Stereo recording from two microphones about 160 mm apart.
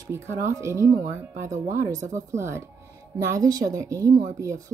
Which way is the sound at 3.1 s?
20° right (ahead or behind).